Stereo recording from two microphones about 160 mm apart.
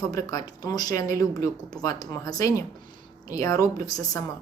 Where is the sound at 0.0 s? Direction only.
20° left (ahead or behind).